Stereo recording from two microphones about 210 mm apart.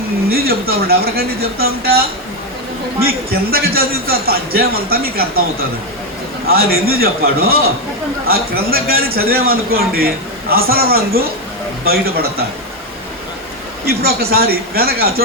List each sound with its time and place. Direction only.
0.3 s a man's voice: 45° right (ahead or behind)
6.5 s a man's voice: 45° right (ahead or behind)
13.8 s a man's voice: 45° right (ahead or behind)